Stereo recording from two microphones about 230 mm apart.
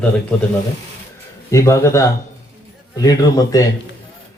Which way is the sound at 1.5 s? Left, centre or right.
Centre.